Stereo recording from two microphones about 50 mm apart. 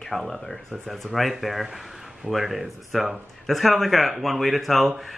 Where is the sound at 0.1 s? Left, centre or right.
Centre.